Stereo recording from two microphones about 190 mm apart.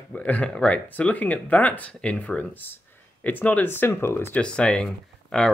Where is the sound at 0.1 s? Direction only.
5° left (ahead or behind).